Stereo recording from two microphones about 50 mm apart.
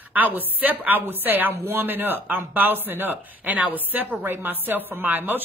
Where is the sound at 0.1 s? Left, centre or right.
Right.